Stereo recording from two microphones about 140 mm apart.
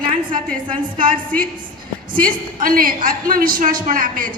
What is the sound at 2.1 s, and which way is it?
A woman's voice, 85° right.